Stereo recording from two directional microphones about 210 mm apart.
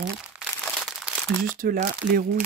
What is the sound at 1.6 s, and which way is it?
Speech, 40° right (ahead or behind).